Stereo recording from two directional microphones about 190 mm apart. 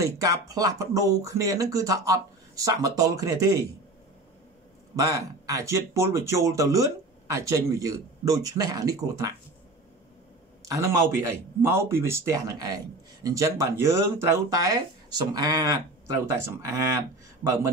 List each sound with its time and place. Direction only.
0.0 s speech: 20° right (ahead or behind)
4.9 s speech: 15° right (ahead or behind)
10.6 s speech: 15° right (ahead or behind)